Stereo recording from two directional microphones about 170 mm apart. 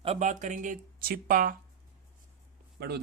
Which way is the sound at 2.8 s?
70° right (ahead or behind).